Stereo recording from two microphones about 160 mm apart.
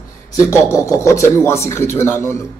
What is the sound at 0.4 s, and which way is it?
A man's voice, 20° left (ahead or behind).